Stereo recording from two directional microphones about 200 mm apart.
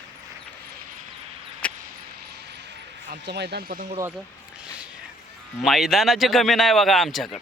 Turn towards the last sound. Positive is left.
turn(degrees=0)  # may be behind; listen again after turning